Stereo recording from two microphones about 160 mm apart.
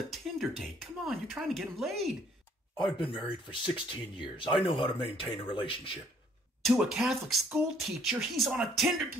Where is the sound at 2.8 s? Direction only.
30° left (ahead or behind).